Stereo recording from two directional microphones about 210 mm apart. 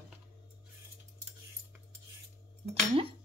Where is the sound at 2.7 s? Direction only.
25° right (ahead or behind).